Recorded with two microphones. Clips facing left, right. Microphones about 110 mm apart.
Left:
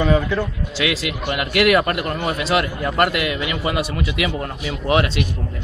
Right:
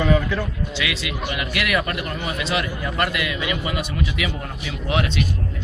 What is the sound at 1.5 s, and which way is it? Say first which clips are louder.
A man's voice: left 9 dB; 45° left (ahead or behind).